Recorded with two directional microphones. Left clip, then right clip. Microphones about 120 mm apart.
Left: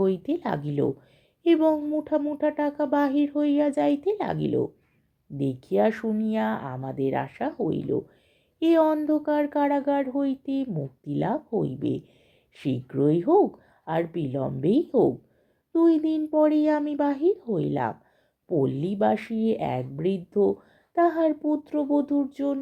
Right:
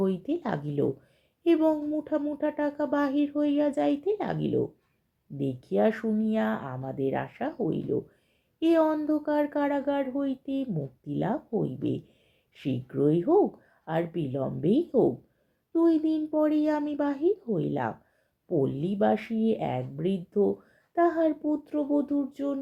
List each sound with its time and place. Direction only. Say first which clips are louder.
0.0 s speech: left 4 dB; 30° left (ahead or behind)